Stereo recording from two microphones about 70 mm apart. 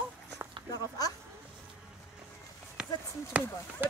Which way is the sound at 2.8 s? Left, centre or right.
Centre.